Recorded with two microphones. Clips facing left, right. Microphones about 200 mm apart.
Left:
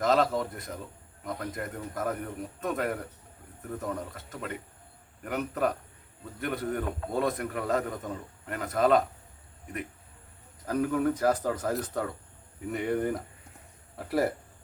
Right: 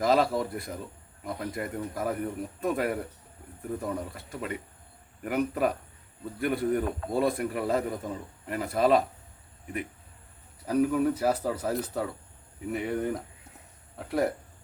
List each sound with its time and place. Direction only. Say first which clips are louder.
0.0 s a man's voice: right 1 dB; 5° right (ahead or behind)
10.7 s a man's voice: right 2 dB; 10° right (ahead or behind)